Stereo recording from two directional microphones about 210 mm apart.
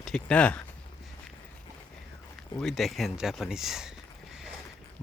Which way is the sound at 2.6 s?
Centre (ahead or behind).